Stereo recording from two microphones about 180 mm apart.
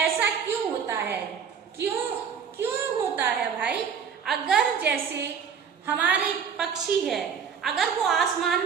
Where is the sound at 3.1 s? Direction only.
10° right (ahead or behind).